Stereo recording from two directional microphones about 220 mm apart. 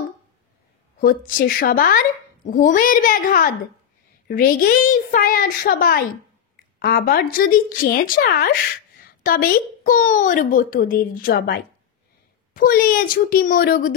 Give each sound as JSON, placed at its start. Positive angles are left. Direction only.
{"t": 0.9, "sound": "a woman's voice", "side_deg": 40}